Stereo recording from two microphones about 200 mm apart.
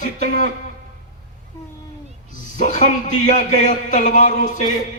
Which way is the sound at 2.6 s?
40° left (ahead or behind).